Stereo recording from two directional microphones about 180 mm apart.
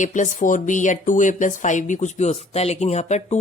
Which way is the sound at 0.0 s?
45° left (ahead or behind).